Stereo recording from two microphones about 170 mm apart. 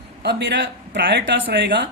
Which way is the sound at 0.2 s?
90° right.